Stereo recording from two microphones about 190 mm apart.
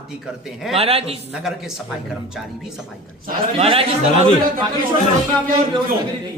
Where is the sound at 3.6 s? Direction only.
30° right (ahead or behind).